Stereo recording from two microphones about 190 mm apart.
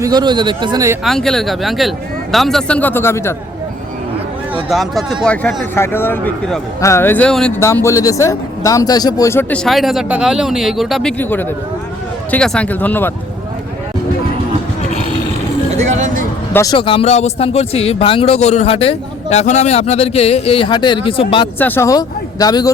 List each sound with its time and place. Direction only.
0.0 s speech: 20° right (ahead or behind)
1.0 s speech: centre (ahead or behind)
4.7 s speech: centre (ahead or behind)
7.6 s speech: 15° left (ahead or behind)
9.6 s speech: centre (ahead or behind)
15.9 s speech: 40° right (ahead or behind)
16.5 s speech: 15° left (ahead or behind)
16.7 s speech: 30° left (ahead or behind)
21.6 s speech: 15° left (ahead or behind)